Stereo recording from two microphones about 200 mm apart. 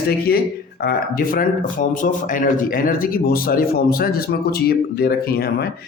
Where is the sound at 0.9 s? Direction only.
45° left (ahead or behind).